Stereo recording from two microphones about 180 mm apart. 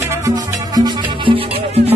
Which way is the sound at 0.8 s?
30° right (ahead or behind).